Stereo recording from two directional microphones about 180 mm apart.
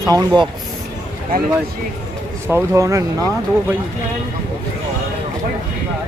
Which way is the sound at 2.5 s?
15° right (ahead or behind).